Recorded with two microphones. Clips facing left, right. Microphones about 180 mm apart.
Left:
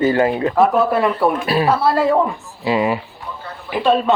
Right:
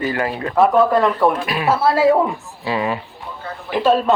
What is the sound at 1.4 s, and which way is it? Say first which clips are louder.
Speech: left 4 dB; 35° left (ahead or behind).